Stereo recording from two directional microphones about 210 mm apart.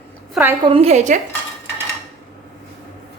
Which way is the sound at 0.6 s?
25° right (ahead or behind).